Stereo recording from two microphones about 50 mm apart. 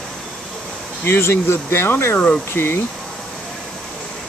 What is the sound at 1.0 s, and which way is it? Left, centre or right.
Speech, left.